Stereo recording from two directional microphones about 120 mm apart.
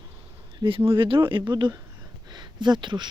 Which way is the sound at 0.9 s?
45° right (ahead or behind).